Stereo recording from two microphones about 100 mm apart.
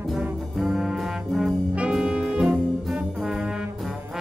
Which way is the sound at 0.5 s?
5° right (ahead or behind).